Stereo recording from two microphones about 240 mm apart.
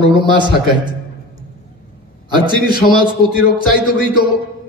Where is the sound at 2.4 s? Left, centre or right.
Centre.